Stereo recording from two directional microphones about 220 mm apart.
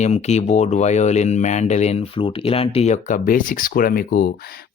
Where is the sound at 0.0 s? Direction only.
30° left (ahead or behind).